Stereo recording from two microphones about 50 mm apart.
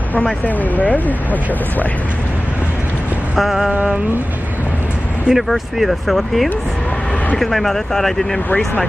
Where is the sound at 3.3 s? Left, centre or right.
Centre.